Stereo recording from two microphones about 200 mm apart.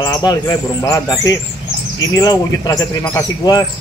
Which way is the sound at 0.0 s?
20° left (ahead or behind).